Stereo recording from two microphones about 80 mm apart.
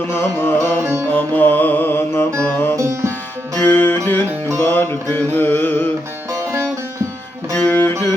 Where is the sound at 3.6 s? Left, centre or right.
Left.